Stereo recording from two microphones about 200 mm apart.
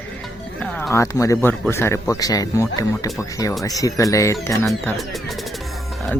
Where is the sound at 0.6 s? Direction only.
5° left (ahead or behind).